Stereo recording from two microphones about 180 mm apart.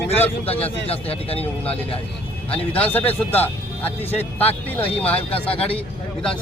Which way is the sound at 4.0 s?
35° left (ahead or behind).